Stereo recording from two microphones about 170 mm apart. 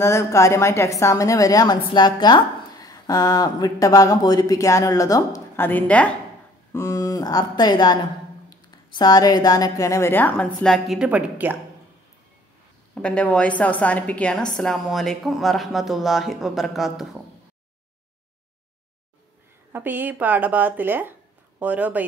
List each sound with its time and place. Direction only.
0.0 s a woman's voice: 15° left (ahead or behind); by 11.5 s 10° right (ahead or behind)
12.9 s a woman's voice: 5° left (ahead or behind)
19.7 s a woman's voice: 10° right (ahead or behind)